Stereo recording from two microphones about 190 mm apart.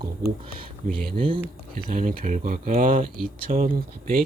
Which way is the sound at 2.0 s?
40° right (ahead or behind).